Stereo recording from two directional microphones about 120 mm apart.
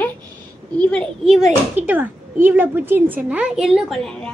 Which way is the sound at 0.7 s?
5° left (ahead or behind).